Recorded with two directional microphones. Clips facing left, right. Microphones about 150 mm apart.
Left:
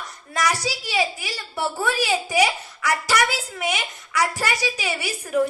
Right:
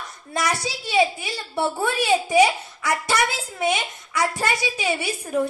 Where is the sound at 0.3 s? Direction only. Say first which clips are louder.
Left 1 dB; 25° right (ahead or behind).